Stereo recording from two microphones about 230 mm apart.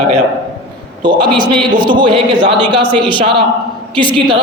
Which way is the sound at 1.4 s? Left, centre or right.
Left.